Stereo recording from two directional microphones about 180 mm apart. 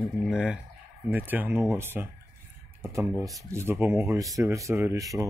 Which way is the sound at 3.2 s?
20° right (ahead or behind).